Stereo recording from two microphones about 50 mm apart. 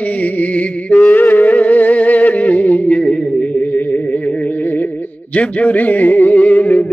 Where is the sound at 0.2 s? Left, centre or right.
Left.